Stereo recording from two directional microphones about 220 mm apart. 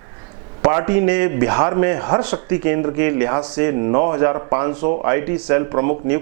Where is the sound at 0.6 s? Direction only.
15° right (ahead or behind).